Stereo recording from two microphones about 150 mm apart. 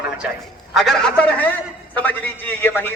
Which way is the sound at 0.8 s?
5° left (ahead or behind).